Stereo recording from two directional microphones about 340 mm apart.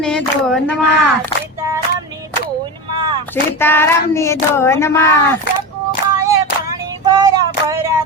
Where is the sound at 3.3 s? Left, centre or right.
Centre.